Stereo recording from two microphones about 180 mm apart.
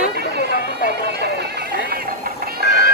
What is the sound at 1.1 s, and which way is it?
Music, 65° right (ahead or behind).